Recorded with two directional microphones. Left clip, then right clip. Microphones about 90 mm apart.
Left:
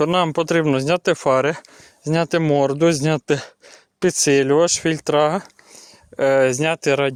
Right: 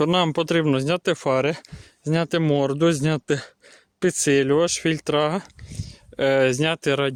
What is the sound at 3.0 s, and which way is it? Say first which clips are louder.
Speech: left 4 dB; 10° left (ahead or behind).